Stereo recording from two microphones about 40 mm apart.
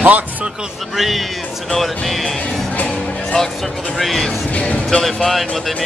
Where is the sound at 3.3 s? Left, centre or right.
Centre.